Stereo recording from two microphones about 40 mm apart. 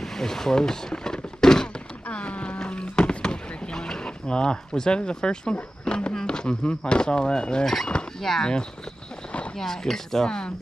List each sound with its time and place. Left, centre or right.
0.0 s speech: centre
2.0 s boat: left
2.6 s rowboat: left
6.2 s speech: left
7.6 s speech: centre
9.6 s speech: centre